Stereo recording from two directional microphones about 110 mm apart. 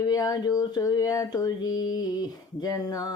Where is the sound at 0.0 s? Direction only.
35° left (ahead or behind).